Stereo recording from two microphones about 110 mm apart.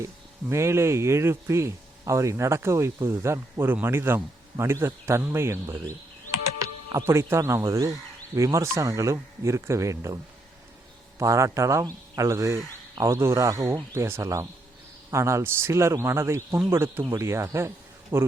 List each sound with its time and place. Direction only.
0.0 s speech: 25° right (ahead or behind)
6.9 s speech: 25° right (ahead or behind)
11.2 s speech: 30° right (ahead or behind)